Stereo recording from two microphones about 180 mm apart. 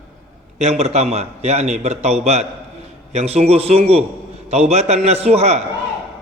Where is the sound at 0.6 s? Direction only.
35° right (ahead or behind).